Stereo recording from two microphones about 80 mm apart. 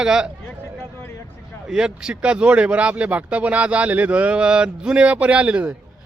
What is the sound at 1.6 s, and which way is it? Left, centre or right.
Speech, centre.